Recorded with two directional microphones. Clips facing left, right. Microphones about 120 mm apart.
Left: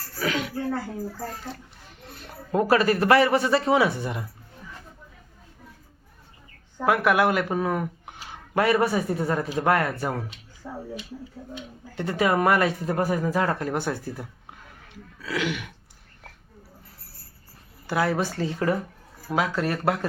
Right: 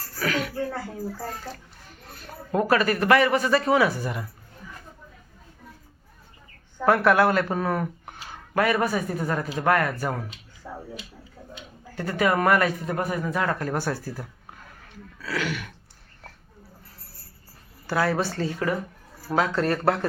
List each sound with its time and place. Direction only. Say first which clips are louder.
0.2 s a sound: even; 20° left (ahead or behind)
2.5 s speech: left 1 dB; 25° left (ahead or behind)
6.8 s speech: right 2 dB; 10° left (ahead or behind)
8.5 s speech: left 1 dB; 30° left (ahead or behind)
11.9 s speech: even; 25° left (ahead or behind)
15.2 s speech: left 1 dB; 20° left (ahead or behind)
17.8 s speech: even; 20° left (ahead or behind)
19.3 s speech: right 2 dB; 5° left (ahead or behind)